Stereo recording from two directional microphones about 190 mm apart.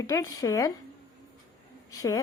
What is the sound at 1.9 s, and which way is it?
Speech, 15° left (ahead or behind).